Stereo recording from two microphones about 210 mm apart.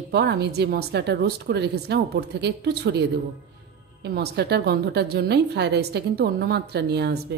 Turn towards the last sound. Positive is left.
turn(degrees=-50)  # may be behind; listen again after turning